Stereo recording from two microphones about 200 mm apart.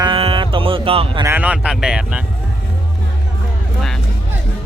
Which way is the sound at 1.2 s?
10° right (ahead or behind).